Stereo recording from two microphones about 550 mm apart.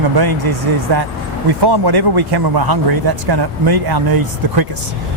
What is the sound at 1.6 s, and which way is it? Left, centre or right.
A man's voice, right.